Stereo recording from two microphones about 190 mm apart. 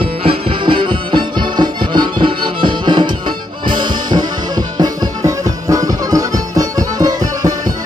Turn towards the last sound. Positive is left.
turn(degrees=-20)  # may be behind; listen again after turning